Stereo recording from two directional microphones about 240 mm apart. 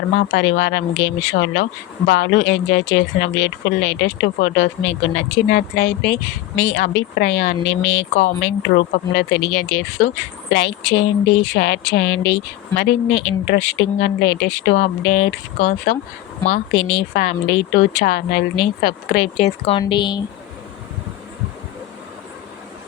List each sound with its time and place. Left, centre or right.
0.2 s a woman's voice: left
19.4 s a woman's voice: left